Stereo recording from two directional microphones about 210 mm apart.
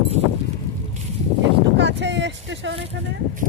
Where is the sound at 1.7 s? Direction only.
55° right (ahead or behind).